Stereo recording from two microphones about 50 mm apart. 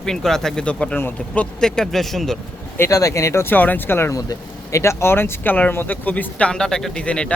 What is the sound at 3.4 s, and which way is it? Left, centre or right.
Speech, left.